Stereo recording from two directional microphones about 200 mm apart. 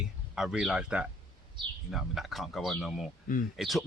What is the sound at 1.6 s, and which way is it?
Speech, 25° right (ahead or behind).